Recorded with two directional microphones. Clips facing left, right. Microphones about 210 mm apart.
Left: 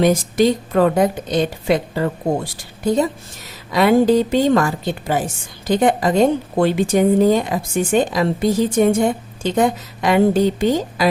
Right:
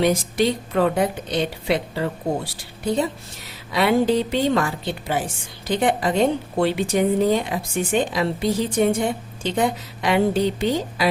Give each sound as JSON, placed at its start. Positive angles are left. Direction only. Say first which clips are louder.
{"t": 0.0, "sound": "a woman's voice", "louder": "left 4 dB", "side_deg": 45}